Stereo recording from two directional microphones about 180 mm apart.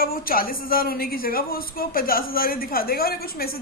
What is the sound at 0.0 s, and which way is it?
A woman's voice, 55° left (ahead or behind).